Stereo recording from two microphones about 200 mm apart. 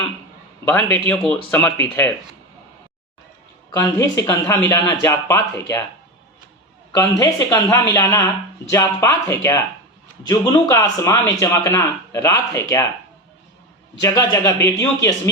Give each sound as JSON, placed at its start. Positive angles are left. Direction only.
{"t": 0.6, "sound": "speech", "side_deg": 10}
{"t": 3.7, "sound": "speech", "side_deg": 15}
{"t": 7.2, "sound": "speech", "side_deg": 15}
{"t": 14.0, "sound": "speech", "side_deg": 15}